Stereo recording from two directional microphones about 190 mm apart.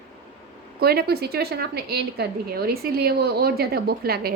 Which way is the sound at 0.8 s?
55° right (ahead or behind).